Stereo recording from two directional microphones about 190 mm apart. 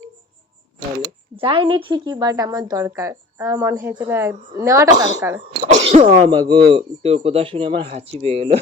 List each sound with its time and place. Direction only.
1.0 s speech: 30° right (ahead or behind)
5.6 s speech: 35° right (ahead or behind)